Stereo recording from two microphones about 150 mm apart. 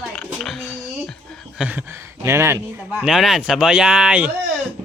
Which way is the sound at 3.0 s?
5° right (ahead or behind).